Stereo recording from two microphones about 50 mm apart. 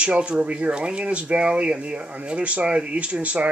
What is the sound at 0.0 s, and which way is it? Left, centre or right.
Speech, right.